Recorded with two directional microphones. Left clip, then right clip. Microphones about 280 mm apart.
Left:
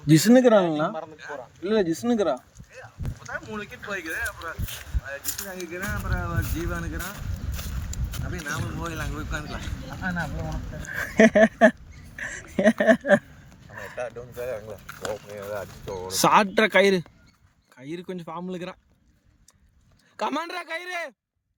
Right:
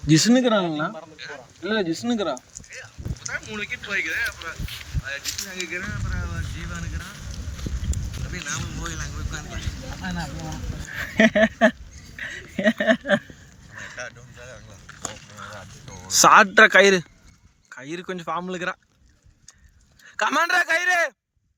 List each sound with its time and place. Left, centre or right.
0.1 s speech: centre
3.4 s speech: left
10.8 s speech: centre
13.9 s a sound: left
16.1 s speech: centre
20.1 s speech: centre